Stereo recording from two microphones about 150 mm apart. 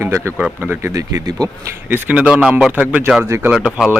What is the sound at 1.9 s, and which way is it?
Speech, 10° right (ahead or behind).